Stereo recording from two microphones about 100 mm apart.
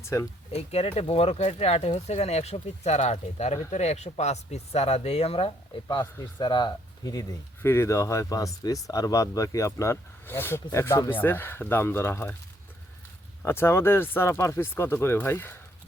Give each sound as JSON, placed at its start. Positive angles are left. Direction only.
{"t": 0.0, "sound": "speech", "side_deg": 30}
{"t": 0.5, "sound": "speech", "side_deg": 85}
{"t": 6.4, "sound": "speech", "side_deg": 50}
{"t": 7.6, "sound": "speech", "side_deg": 25}
{"t": 13.4, "sound": "speech", "side_deg": 25}